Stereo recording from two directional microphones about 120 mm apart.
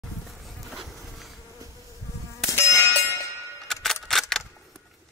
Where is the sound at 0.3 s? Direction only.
Centre (ahead or behind).